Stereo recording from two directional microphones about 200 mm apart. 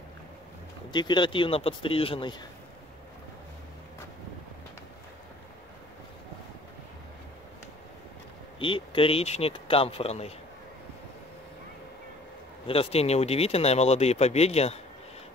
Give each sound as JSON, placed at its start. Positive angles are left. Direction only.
{"t": 0.9, "sound": "speech", "side_deg": 20}
{"t": 8.5, "sound": "speech", "side_deg": 25}
{"t": 12.6, "sound": "speech", "side_deg": 30}